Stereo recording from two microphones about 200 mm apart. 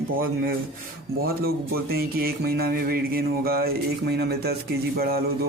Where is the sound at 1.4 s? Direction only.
50° right (ahead or behind).